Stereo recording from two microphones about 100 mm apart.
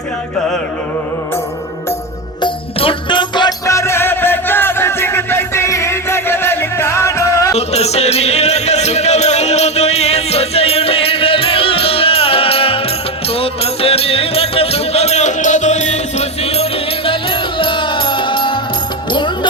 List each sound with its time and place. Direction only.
2.7 s music: 60° left (ahead or behind)
3.7 s music: 30° left (ahead or behind)
7.5 s music: 90° left; by 19.5 s 50° left (ahead or behind)